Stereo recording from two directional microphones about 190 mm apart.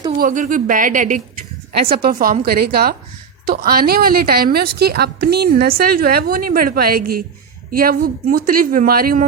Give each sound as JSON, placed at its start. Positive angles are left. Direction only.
{"t": 0.2, "sound": "a woman's voice", "side_deg": -45}